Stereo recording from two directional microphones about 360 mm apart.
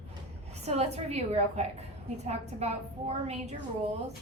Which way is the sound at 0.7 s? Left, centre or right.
Centre.